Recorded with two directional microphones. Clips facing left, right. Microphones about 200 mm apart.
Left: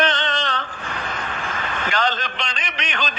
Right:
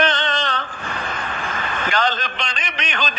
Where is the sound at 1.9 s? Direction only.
50° right (ahead or behind).